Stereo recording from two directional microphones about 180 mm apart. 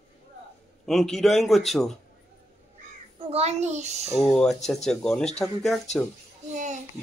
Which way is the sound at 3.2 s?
35° right (ahead or behind).